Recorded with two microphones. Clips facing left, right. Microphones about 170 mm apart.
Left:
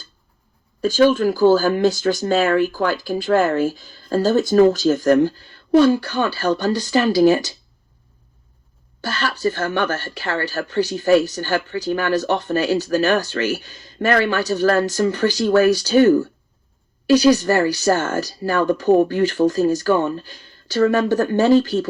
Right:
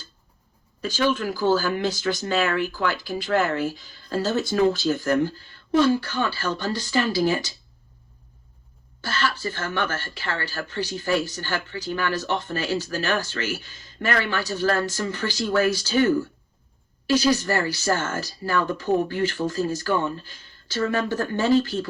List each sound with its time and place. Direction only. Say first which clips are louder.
0.8 s speech: left 9 dB; 45° left (ahead or behind)
9.0 s speech: left 3 dB; 40° left (ahead or behind)